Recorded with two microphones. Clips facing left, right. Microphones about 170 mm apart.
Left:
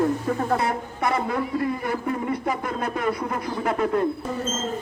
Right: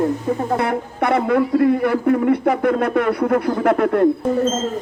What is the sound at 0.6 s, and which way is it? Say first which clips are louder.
Speech: right 5 dB; 60° right (ahead or behind).